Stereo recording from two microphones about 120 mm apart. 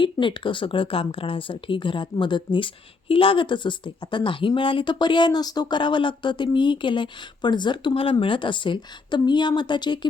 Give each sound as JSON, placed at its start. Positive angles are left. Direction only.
{"t": 0.0, "sound": "speech", "side_deg": 45}